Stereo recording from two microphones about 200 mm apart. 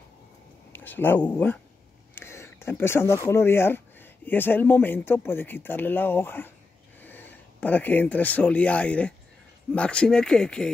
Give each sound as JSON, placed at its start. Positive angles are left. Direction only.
{"t": 0.7, "sound": "speech", "side_deg": 10}